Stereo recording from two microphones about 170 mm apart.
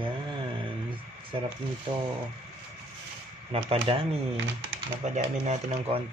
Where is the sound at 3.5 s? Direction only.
35° right (ahead or behind).